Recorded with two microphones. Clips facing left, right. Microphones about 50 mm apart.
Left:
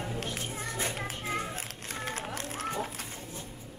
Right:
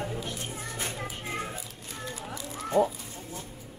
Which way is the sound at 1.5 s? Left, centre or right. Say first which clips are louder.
Left 2 dB; left.